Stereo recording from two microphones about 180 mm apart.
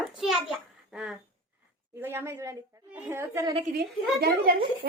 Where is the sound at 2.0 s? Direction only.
15° right (ahead or behind).